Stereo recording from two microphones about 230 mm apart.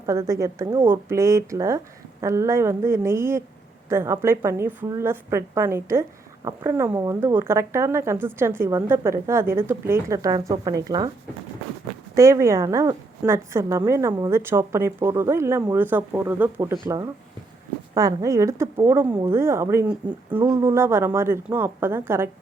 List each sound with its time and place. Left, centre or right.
0.0 s a woman's voice: centre
12.1 s a woman's voice: centre